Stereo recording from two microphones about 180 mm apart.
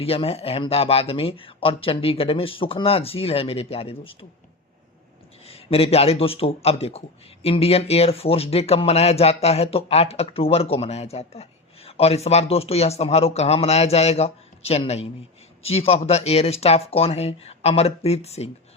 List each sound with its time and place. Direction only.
0.0 s speech: 35° left (ahead or behind)
5.5 s speech: 35° left (ahead or behind)